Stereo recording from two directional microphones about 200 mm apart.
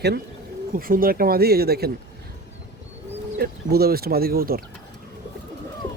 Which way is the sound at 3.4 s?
50° right (ahead or behind).